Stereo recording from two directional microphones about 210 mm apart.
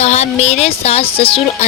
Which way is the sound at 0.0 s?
30° left (ahead or behind).